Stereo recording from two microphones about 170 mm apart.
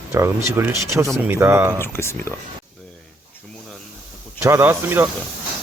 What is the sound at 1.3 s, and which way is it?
Speech, 15° right (ahead or behind).